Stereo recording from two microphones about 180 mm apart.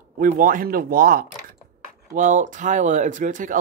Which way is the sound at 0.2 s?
50° right (ahead or behind).